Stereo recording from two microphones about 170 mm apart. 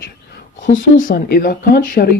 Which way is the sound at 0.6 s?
50° left (ahead or behind).